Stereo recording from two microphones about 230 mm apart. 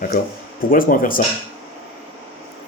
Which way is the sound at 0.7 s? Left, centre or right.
Left.